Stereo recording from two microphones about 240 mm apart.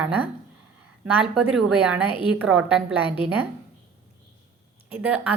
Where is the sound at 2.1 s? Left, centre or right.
Left.